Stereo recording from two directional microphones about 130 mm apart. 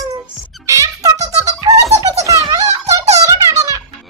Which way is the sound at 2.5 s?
25° right (ahead or behind).